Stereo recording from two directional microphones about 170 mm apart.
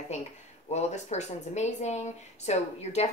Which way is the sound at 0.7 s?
40° left (ahead or behind).